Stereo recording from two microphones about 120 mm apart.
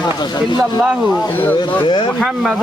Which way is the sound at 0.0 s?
35° left (ahead or behind).